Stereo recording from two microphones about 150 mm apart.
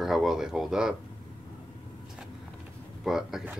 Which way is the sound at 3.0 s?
5° right (ahead or behind).